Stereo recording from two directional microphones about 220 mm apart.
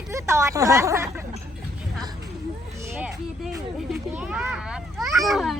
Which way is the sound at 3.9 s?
5° right (ahead or behind).